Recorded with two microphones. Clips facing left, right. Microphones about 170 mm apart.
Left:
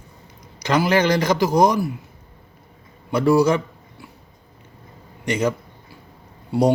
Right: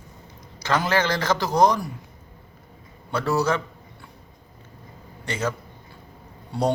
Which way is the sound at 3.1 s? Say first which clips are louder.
Left 7 dB; 15° left (ahead or behind).